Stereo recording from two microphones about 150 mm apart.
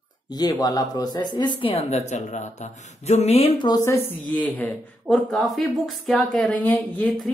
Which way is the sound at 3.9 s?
10° left (ahead or behind).